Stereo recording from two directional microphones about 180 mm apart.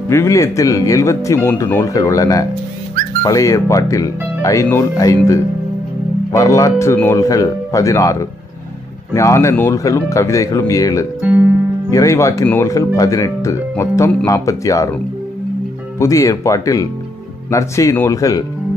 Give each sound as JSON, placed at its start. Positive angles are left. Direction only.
{"t": 0.1, "sound": "speech", "side_deg": 15}
{"t": 11.1, "sound": "speech", "side_deg": -10}
{"t": 11.9, "sound": "speech", "side_deg": 20}
{"t": 16.0, "sound": "speech", "side_deg": 20}